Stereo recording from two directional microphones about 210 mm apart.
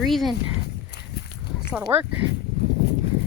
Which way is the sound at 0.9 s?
50° left (ahead or behind).